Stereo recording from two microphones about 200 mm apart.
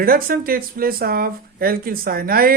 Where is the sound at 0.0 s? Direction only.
45° right (ahead or behind).